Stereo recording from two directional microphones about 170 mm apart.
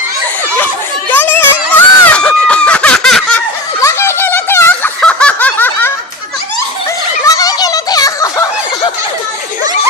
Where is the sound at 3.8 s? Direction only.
15° left (ahead or behind).